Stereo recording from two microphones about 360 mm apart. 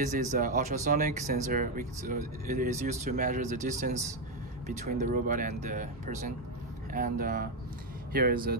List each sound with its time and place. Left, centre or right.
0.0 s speech: right